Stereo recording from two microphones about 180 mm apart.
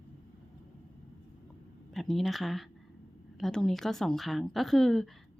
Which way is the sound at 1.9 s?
Centre (ahead or behind).